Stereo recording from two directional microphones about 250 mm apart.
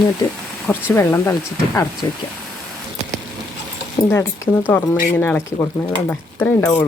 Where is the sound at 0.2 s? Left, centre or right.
Centre.